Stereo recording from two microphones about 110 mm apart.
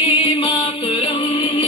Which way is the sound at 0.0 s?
55° left (ahead or behind).